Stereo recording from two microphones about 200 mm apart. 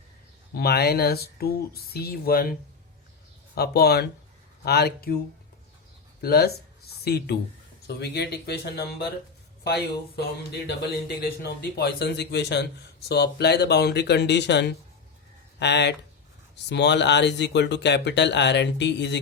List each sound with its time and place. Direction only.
0.5 s speech: 55° left (ahead or behind)
6.2 s speech: 50° left (ahead or behind)
11.2 s speech: 55° left (ahead or behind)